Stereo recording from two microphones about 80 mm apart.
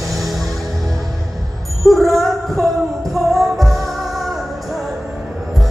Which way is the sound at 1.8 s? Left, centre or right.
Centre.